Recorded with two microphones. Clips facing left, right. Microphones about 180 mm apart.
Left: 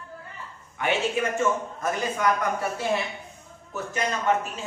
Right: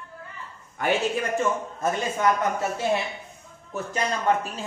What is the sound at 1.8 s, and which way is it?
Speech, 25° right (ahead or behind).